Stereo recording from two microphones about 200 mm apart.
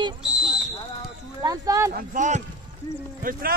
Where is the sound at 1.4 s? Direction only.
20° right (ahead or behind).